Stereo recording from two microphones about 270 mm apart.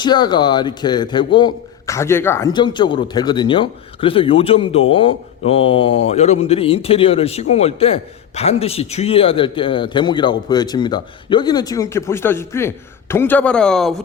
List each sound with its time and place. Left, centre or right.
0.0 s speech: centre
4.9 s mantra: centre
6.1 s speech: left; by 13.9 s centre